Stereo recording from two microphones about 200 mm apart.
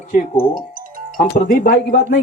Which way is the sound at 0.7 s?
45° right (ahead or behind).